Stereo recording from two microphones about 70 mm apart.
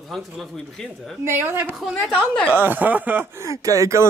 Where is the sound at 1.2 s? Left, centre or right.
Right.